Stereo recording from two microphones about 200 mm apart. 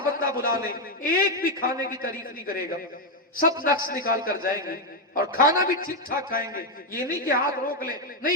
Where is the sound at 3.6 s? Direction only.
45° left (ahead or behind).